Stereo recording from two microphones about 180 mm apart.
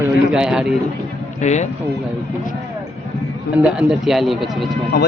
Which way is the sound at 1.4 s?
40° left (ahead or behind).